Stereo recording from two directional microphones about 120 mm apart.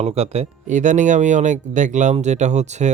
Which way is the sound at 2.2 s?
75° right (ahead or behind).